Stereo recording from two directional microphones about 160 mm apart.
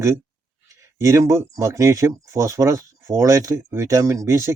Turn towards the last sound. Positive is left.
turn(degrees=-20)  # may be behind; listen again after turning